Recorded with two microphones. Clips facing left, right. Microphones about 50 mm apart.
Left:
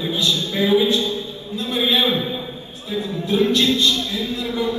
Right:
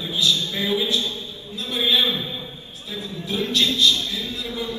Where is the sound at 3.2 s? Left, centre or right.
Left.